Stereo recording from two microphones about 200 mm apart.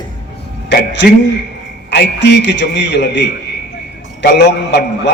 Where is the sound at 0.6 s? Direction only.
60° left (ahead or behind).